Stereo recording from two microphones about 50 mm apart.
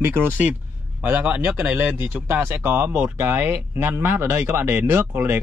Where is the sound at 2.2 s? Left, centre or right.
Right.